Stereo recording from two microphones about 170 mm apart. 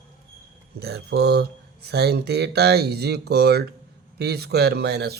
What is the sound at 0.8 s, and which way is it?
Speech, 75° right (ahead or behind).